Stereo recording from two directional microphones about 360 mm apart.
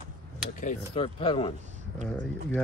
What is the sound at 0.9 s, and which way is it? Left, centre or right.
Speech, centre.